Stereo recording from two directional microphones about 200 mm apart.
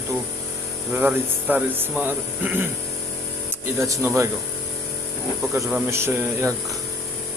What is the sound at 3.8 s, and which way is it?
Speech, 15° right (ahead or behind).